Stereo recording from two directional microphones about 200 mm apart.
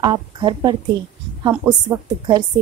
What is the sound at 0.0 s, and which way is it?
Speech, 20° right (ahead or behind).